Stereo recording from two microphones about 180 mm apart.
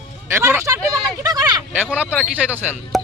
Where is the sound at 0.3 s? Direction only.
15° right (ahead or behind).